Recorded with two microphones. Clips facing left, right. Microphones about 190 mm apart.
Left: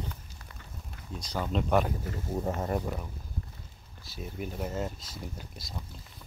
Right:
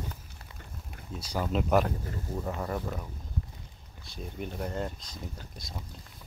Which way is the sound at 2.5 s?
20° left (ahead or behind).